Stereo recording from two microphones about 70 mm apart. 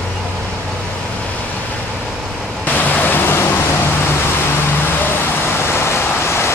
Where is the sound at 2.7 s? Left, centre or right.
Left.